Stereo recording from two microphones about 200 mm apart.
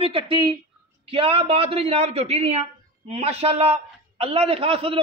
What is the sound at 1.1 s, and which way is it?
A man's voice, 30° right (ahead or behind).